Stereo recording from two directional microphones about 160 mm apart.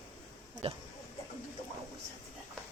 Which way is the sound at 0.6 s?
35° right (ahead or behind).